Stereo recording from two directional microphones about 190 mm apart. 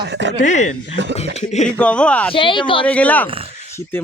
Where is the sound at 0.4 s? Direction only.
40° left (ahead or behind).